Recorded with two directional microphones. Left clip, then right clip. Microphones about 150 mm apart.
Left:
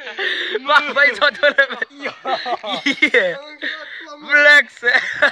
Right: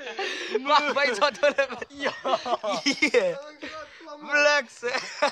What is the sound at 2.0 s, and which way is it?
Speech, 50° right (ahead or behind).